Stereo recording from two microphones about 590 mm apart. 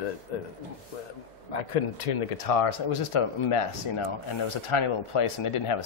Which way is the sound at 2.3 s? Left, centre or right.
Left.